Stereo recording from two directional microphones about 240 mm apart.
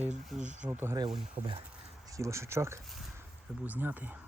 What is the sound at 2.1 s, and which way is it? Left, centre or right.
Speech, centre.